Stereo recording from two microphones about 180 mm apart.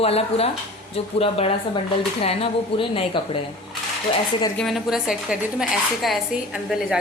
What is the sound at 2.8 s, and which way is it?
Speech, 30° left (ahead or behind).